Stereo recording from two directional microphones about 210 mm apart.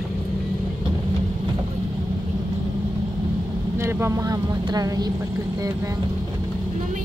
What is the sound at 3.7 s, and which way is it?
Speech, 10° right (ahead or behind).